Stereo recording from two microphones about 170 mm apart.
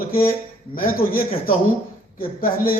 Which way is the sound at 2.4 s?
60° left (ahead or behind).